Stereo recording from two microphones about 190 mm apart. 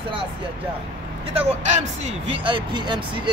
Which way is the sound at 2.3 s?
25° right (ahead or behind).